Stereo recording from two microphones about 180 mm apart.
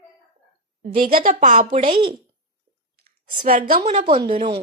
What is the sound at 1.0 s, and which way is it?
Speech, 50° right (ahead or behind).